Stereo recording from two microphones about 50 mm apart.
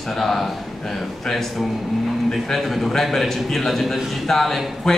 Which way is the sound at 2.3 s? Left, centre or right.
Centre.